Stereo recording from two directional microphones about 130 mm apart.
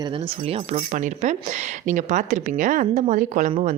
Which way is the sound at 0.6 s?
70° right (ahead or behind).